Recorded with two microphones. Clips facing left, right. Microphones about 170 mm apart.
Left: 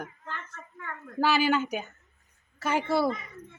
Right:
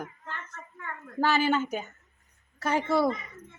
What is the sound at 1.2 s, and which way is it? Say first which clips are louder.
Speech: even; 10° left (ahead or behind).